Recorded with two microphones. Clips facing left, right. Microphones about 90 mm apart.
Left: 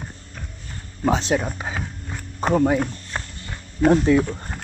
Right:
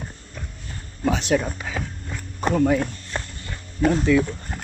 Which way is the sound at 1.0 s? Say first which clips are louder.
Left 2 dB; 30° left (ahead or behind).